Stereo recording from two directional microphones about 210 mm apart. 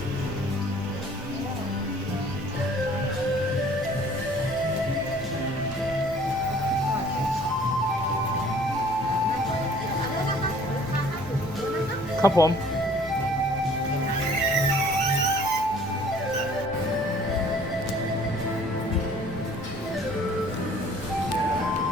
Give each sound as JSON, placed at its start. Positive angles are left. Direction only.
{"t": 12.2, "sound": "speech", "side_deg": 15}